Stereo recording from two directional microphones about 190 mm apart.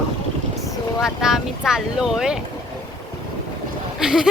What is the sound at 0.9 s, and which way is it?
Vehicle, 5° right (ahead or behind).